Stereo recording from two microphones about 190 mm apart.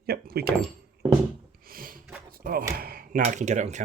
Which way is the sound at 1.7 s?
50° right (ahead or behind).